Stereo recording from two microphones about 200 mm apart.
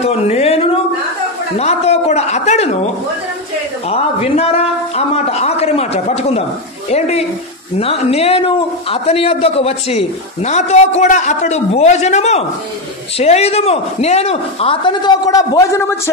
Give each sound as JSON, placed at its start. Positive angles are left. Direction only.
{"t": 0.0, "sound": "a sound", "side_deg": 30}
{"t": 1.6, "sound": "a man's voice", "side_deg": 30}
{"t": 3.9, "sound": "a man's voice", "side_deg": 30}